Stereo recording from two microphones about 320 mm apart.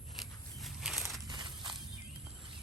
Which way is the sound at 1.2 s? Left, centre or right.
Centre.